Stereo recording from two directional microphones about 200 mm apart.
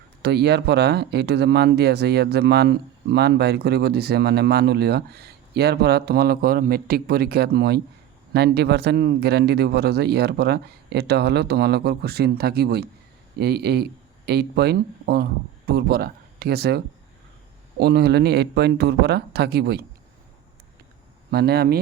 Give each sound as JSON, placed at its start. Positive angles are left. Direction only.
{"t": 0.2, "sound": "speech", "side_deg": -55}
{"t": 21.2, "sound": "speech", "side_deg": -50}